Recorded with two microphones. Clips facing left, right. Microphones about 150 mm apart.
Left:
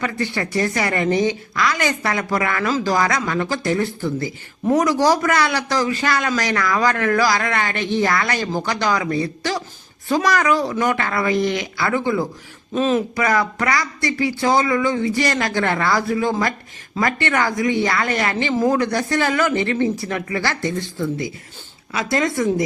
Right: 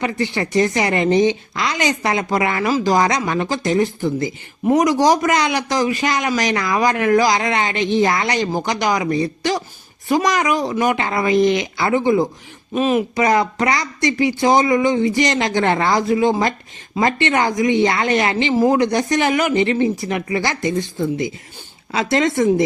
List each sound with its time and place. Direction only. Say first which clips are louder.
0.0 s speech: right 2 dB; 20° right (ahead or behind)